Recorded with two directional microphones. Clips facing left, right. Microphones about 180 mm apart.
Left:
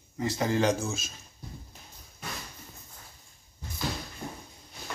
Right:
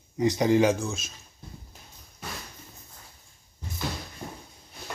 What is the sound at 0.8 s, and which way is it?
Speech, centre (ahead or behind).